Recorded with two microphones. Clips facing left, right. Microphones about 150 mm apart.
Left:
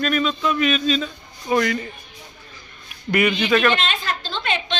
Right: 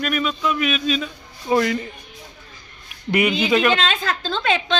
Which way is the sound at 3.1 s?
20° right (ahead or behind).